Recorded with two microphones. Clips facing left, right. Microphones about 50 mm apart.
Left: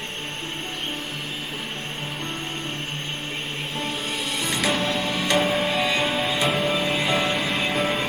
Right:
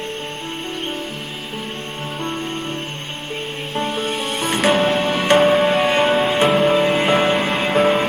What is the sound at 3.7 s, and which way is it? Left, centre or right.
Music, right.